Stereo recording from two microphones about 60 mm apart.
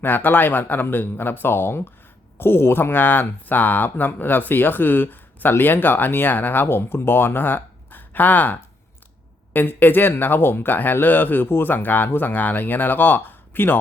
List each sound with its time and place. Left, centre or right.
0.0 s speech: left